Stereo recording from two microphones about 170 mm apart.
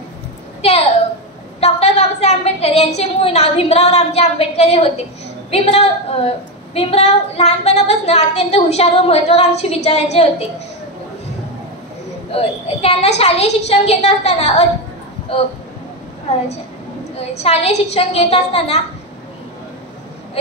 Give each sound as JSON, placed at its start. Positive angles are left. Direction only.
{"t": 0.6, "sound": "a sound", "side_deg": 35}
{"t": 1.6, "sound": "a woman's voice", "side_deg": 40}
{"t": 12.3, "sound": "speech", "side_deg": 35}